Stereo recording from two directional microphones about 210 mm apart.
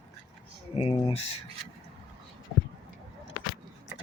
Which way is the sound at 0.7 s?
30° left (ahead or behind).